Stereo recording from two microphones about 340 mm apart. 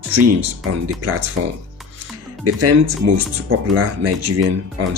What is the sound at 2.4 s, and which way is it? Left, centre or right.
Speech, right.